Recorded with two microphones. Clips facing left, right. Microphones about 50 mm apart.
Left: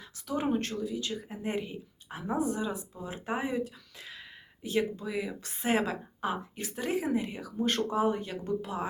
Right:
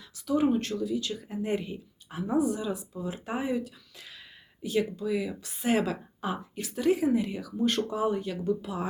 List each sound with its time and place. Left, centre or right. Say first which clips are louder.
0.5 s speech: right 3 dB; left